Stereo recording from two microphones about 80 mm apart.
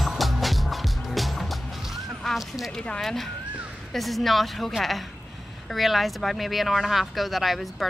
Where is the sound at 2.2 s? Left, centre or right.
Centre.